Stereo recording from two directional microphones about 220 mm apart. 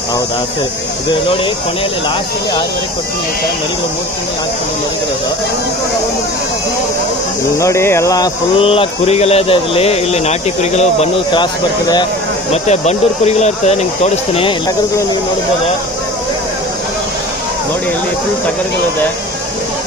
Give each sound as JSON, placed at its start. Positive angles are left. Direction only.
{"t": 7.5, "sound": "speech", "side_deg": 15}